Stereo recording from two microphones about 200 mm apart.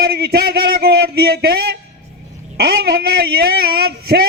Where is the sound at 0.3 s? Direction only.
50° right (ahead or behind).